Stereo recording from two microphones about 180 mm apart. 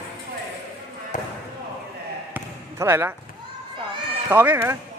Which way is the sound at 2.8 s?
15° right (ahead or behind).